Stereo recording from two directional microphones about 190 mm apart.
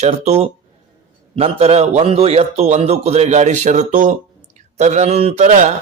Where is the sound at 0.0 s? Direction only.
35° right (ahead or behind).